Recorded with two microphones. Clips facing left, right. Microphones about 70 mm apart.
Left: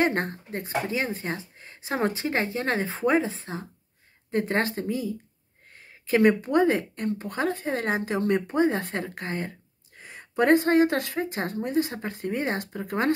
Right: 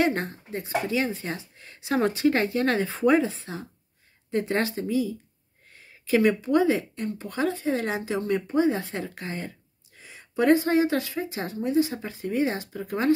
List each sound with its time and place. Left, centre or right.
0.0 s speech: left